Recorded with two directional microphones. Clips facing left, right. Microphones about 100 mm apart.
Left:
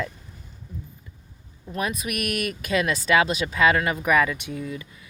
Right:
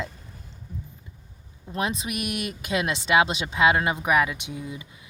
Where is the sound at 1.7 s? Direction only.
30° right (ahead or behind).